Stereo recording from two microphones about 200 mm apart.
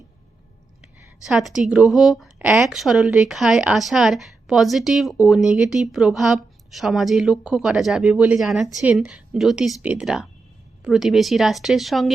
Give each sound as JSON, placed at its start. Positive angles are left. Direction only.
{"t": 0.8, "sound": "a woman's voice", "side_deg": -5}